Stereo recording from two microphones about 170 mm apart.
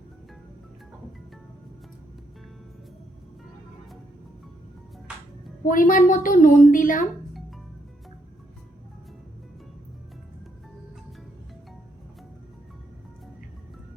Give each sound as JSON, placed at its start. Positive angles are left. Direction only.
{"t": 5.6, "sound": "a woman's voice", "side_deg": 55}